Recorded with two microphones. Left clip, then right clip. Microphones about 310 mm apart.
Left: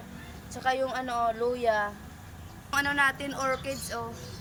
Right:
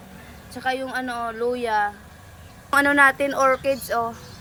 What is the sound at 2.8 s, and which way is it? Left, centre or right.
Speech, centre.